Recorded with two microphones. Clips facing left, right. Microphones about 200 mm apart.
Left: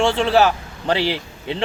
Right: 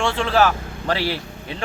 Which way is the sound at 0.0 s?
20° left (ahead or behind).